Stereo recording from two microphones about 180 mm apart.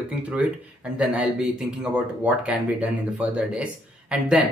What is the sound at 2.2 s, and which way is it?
Speech, 5° right (ahead or behind).